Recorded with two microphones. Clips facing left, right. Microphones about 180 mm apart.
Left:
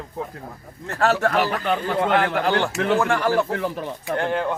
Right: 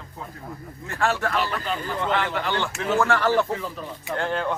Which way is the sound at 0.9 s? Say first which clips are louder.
Left 4 dB; 40° left (ahead or behind).